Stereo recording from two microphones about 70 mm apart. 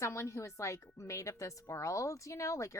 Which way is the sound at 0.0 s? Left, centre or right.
Left.